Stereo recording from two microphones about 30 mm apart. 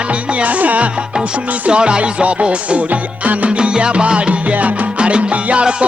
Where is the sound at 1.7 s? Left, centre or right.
Right.